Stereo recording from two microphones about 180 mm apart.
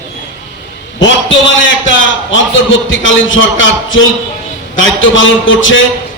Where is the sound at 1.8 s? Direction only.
90° left.